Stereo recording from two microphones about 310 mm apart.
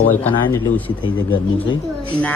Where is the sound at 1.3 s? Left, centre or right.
Centre.